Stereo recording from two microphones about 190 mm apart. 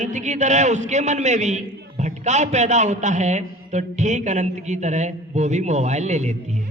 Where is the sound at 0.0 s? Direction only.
40° right (ahead or behind).